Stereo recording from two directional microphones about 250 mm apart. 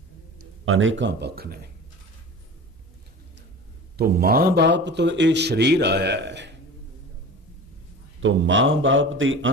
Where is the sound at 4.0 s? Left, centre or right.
Right.